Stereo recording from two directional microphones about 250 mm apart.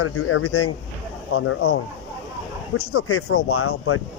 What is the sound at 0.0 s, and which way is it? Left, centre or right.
Speech, left.